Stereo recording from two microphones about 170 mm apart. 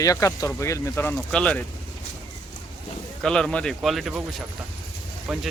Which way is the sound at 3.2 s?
5° left (ahead or behind).